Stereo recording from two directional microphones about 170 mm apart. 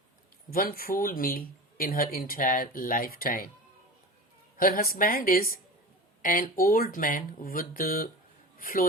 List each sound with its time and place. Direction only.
0.5 s speech: 55° left (ahead or behind)
4.5 s a man's voice: 60° left (ahead or behind)